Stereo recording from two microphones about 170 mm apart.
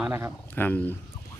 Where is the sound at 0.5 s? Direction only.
10° left (ahead or behind).